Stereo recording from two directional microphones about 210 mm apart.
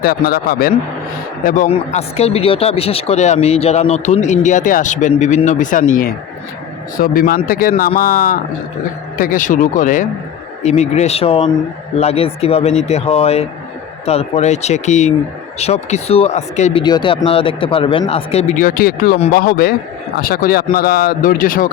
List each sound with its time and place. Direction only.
0.0 s speech: 45° left (ahead or behind)
1.5 s speech: 35° left (ahead or behind)
16.8 s speech: 20° left (ahead or behind); by 21.7 s 40° left (ahead or behind)